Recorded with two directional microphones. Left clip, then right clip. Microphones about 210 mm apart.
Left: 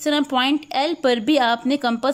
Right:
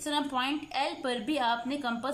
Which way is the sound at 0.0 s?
40° left (ahead or behind).